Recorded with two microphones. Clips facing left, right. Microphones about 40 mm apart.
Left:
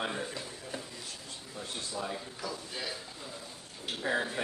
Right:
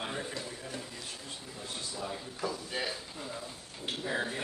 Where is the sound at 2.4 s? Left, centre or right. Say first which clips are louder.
Right 6 dB; right.